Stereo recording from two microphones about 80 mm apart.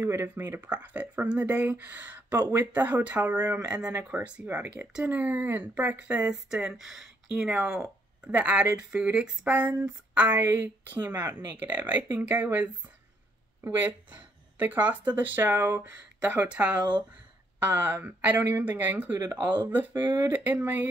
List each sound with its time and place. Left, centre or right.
0.0 s speech: right
0.6 s speech: centre
6.5 s speech: centre
7.3 s speech: centre
16.2 s speech: centre
20.3 s speech: right